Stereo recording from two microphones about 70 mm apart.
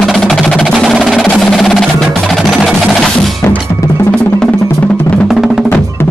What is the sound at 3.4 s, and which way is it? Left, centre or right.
Music, left.